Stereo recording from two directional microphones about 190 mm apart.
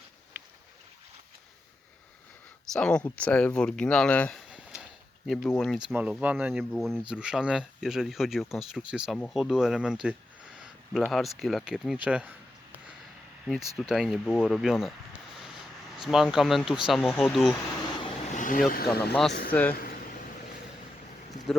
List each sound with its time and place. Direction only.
2.7 s speech: 5° left (ahead or behind)
13.7 s speech: centre (ahead or behind)
18.0 s vehicle: 40° left (ahead or behind)
18.7 s speech: 55° left (ahead or behind)
19.5 s speech: 10° left (ahead or behind)